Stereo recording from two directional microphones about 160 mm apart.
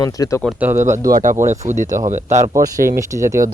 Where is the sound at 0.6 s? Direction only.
15° right (ahead or behind).